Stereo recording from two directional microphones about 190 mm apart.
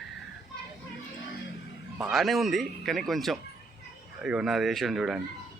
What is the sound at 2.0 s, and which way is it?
A man's voice, centre (ahead or behind).